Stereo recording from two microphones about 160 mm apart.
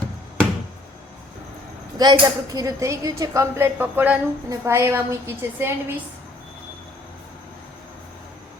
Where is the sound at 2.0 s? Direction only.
25° right (ahead or behind).